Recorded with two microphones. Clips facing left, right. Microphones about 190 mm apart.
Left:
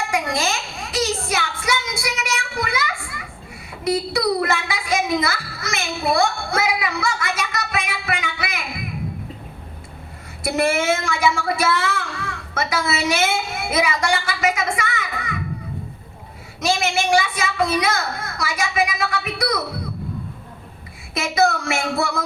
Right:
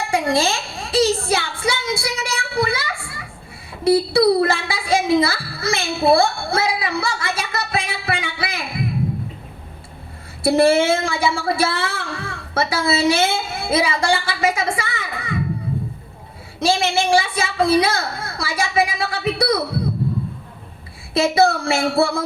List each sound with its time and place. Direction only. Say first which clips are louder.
0.1 s a child's voice: right 7 dB; 30° right (ahead or behind)
10.4 s a woman's voice: right 5 dB; 30° right (ahead or behind)
16.6 s a woman's voice: right 3 dB; 30° right (ahead or behind)
21.1 s a woman's voice: right 4 dB; 30° right (ahead or behind)